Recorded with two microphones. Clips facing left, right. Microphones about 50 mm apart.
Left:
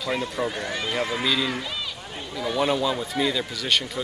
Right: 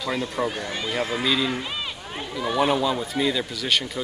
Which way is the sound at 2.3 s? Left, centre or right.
Right.